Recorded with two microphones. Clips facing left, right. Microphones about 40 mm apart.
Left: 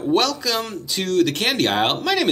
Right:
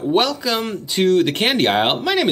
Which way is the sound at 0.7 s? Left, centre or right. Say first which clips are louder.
Right 7 dB; right.